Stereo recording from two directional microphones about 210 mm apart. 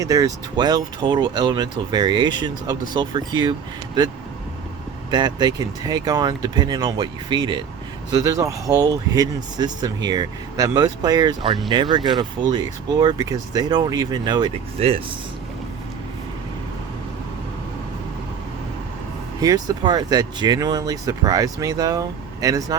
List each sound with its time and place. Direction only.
0.0 s speech: 15° right (ahead or behind)
5.1 s speech: 20° right (ahead or behind)
19.4 s speech: 15° right (ahead or behind)